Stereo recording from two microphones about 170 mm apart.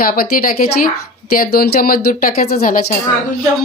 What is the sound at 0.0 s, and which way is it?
A woman's voice, 60° left (ahead or behind).